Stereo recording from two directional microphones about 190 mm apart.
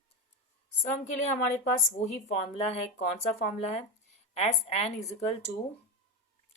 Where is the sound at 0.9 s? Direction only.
40° left (ahead or behind).